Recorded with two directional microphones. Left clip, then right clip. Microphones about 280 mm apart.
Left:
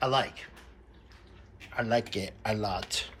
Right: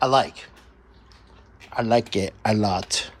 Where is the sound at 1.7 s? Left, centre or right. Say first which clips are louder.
Right 8 dB; centre.